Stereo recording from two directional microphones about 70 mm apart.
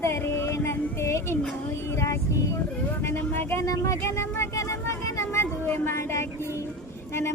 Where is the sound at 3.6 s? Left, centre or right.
Left.